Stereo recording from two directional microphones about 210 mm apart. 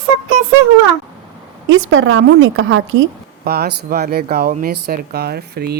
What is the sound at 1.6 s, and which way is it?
A woman's voice, 65° right (ahead or behind).